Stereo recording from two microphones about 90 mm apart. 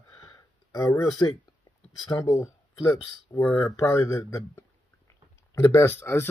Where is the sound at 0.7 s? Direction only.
35° left (ahead or behind).